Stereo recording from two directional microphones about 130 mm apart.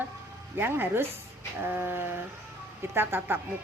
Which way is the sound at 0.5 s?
15° right (ahead or behind).